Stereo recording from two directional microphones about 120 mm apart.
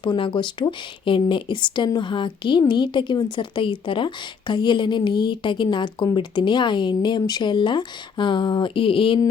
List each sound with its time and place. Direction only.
0.0 s a woman's voice: 45° left (ahead or behind)